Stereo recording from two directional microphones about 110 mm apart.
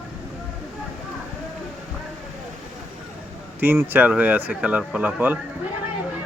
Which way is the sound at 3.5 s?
15° right (ahead or behind).